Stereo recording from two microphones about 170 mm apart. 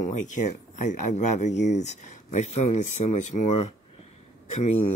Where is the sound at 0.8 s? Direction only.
45° left (ahead or behind).